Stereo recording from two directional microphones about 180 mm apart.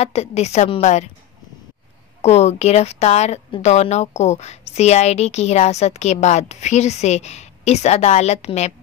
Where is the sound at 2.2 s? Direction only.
35° left (ahead or behind).